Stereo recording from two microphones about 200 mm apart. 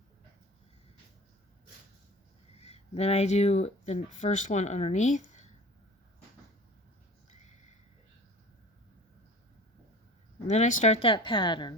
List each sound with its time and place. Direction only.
2.6 s speech: 30° left (ahead or behind)
10.4 s speech: 35° left (ahead or behind)